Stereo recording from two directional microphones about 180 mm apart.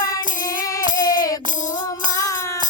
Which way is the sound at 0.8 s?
45° left (ahead or behind).